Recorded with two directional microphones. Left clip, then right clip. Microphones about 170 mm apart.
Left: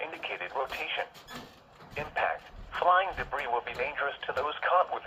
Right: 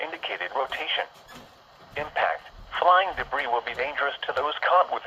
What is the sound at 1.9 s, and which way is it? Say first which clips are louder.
Speech: right 5 dB; 50° right (ahead or behind).